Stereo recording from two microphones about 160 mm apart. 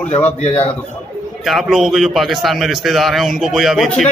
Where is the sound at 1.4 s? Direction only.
Centre (ahead or behind).